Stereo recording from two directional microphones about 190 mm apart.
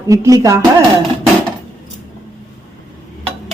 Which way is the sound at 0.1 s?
15° right (ahead or behind).